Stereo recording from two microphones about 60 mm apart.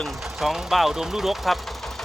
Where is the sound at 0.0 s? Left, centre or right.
Centre.